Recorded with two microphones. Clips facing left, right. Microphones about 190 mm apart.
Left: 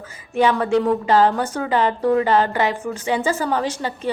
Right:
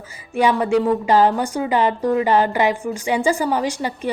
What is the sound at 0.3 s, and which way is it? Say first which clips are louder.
A woman's voice: even; 10° right (ahead or behind).